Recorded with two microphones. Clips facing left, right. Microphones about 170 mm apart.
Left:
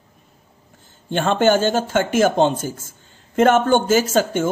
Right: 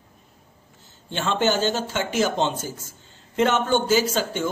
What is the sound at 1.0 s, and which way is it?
Speech, 50° left (ahead or behind).